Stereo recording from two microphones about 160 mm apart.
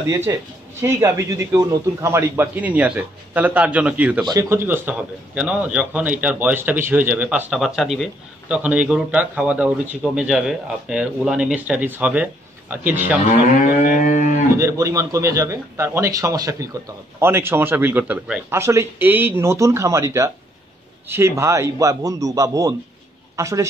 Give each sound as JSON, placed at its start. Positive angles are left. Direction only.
{"t": 0.1, "sound": "a man's voice", "side_deg": -15}
{"t": 13.9, "sound": "cattle", "side_deg": 50}
{"t": 14.6, "sound": "a man's voice", "side_deg": -20}
{"t": 18.6, "sound": "a man's voice", "side_deg": -15}